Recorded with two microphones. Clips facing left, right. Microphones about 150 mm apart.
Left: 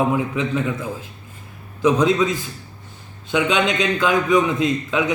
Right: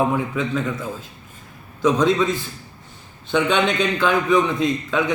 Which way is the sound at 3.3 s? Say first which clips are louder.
Even; 10° left (ahead or behind).